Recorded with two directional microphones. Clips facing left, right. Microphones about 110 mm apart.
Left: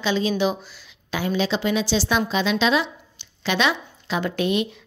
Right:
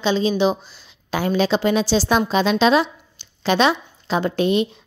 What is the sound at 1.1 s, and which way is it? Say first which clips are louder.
A woman's voice: right 4 dB; 45° right (ahead or behind).